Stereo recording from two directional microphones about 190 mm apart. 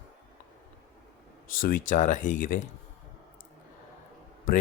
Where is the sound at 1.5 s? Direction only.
45° left (ahead or behind).